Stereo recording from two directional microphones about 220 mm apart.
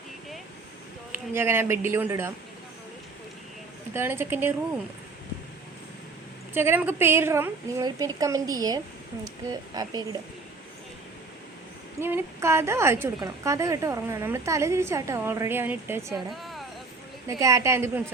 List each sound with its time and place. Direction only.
1.1 s a woman's voice: 10° right (ahead or behind)
3.9 s a woman's voice: 10° right (ahead or behind)
6.5 s a woman's voice: 10° right (ahead or behind)
11.9 s a woman's voice: 10° right (ahead or behind)
16.3 s a sound: centre (ahead or behind)
17.2 s a woman's voice: 15° right (ahead or behind)